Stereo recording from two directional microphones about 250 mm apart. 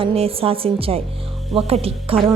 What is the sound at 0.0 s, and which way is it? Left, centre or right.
Speech, right.